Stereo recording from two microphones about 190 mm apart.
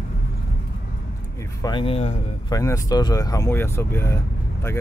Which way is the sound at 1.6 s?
25° left (ahead or behind).